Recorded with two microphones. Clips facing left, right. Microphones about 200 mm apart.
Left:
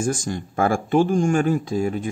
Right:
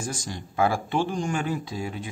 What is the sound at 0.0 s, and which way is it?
Speech, 50° left (ahead or behind).